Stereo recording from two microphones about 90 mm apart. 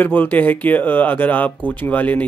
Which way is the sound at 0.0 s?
20° left (ahead or behind).